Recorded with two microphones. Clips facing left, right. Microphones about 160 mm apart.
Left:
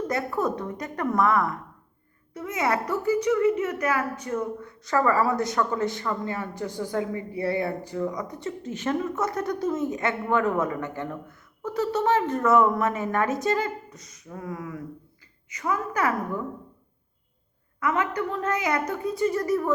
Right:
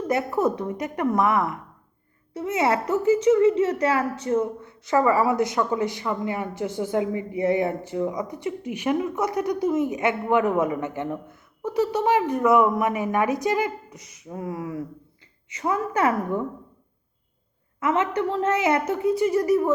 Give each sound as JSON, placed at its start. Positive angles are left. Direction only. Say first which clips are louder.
{"t": 0.1, "sound": "speech", "louder": "right 7 dB", "side_deg": -20}
{"t": 17.7, "sound": "speech", "louder": "right 3 dB", "side_deg": -25}